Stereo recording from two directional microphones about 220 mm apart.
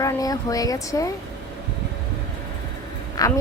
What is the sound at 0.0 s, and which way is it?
Speech, 15° left (ahead or behind).